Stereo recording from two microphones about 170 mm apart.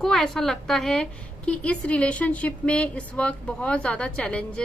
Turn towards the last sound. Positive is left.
turn(degrees=5)  # may be behind; listen again after turning